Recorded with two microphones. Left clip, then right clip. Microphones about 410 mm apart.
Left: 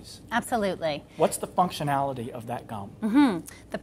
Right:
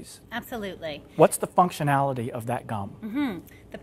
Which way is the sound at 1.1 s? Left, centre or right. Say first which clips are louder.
Right 6 dB; right.